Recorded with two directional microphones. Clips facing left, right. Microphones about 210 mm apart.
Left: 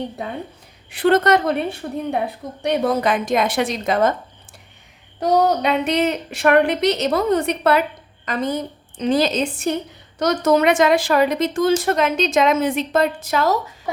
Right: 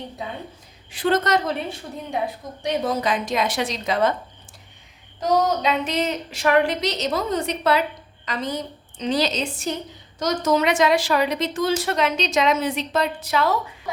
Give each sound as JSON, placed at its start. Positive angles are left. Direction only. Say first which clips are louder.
{"t": 0.9, "sound": "a woman's voice", "louder": "left 5 dB", "side_deg": 60}
{"t": 5.2, "sound": "a woman's voice", "louder": "left 3 dB", "side_deg": 65}